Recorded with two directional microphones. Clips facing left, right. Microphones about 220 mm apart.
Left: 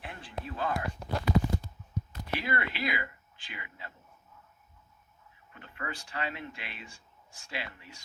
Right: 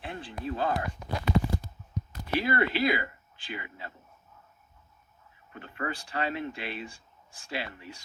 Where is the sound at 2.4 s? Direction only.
35° right (ahead or behind).